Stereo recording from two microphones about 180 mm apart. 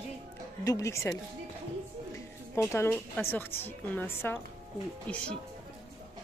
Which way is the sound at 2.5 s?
15° left (ahead or behind).